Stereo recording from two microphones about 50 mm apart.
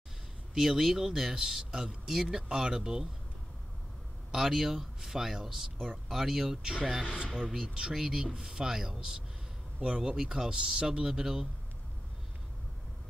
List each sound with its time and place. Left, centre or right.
0.6 s speech: centre
4.3 s speech: centre
7.2 s speech: right
7.9 s speech: centre
9.8 s speech: right